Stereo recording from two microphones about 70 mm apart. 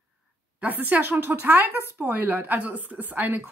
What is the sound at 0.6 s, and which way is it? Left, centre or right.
Speech, right.